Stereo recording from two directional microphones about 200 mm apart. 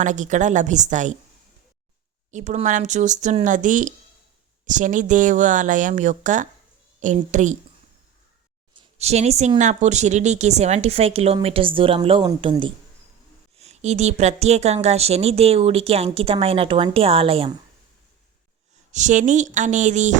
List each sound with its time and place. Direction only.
0.0 s speech: 40° right (ahead or behind)
2.3 s speech: 35° right (ahead or behind)
8.7 s speech: 30° right (ahead or behind)
18.9 s speech: 35° right (ahead or behind)